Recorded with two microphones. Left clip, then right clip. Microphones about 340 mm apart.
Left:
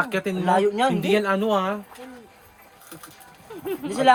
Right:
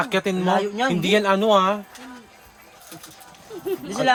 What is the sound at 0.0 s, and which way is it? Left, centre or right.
A man's voice, right.